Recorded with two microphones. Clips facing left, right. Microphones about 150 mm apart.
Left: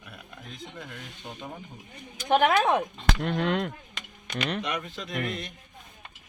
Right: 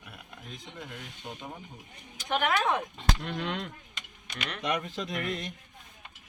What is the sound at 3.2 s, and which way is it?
Speech, 55° left (ahead or behind).